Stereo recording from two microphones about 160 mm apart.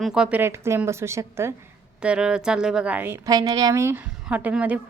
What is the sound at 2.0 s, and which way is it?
Speech, 5° right (ahead or behind).